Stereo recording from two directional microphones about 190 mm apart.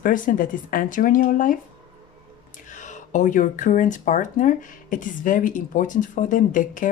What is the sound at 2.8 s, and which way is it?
Speech, 40° left (ahead or behind).